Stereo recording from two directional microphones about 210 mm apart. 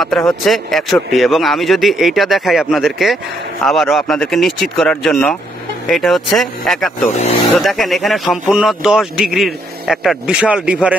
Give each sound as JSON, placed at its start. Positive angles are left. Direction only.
{"t": 0.3, "sound": "speech", "side_deg": 0}
{"t": 7.1, "sound": "speech", "side_deg": 30}
{"t": 7.5, "sound": "speech", "side_deg": 0}